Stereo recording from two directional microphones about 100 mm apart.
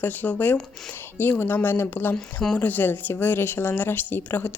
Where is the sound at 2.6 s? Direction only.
15° left (ahead or behind).